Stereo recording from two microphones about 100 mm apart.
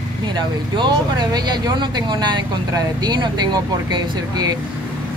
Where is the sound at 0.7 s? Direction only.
45° right (ahead or behind).